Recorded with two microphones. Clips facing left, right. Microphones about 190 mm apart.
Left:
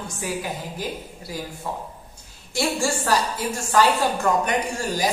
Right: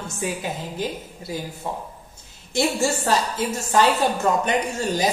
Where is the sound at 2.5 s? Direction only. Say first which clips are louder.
Right 2 dB; 20° right (ahead or behind).